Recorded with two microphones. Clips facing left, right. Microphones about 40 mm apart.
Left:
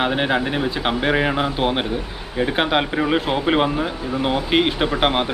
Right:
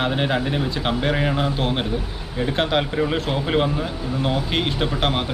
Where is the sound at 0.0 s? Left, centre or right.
Centre.